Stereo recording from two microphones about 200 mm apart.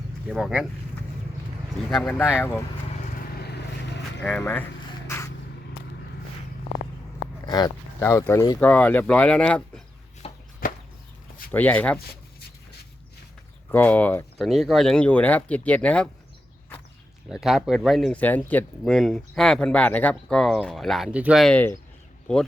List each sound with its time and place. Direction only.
0.3 s speech: 5° right (ahead or behind)
1.9 s speech: 5° left (ahead or behind)
3.3 s vehicle: 55° left (ahead or behind)
4.2 s speech: 10° left (ahead or behind)
5.0 s spray: 15° left (ahead or behind)
7.4 s speech: 20° left (ahead or behind)
10.2 s a sound: 30° left (ahead or behind)
11.5 s speech: 10° left (ahead or behind)
13.7 s speech: 10° left (ahead or behind)
17.2 s speech: centre (ahead or behind)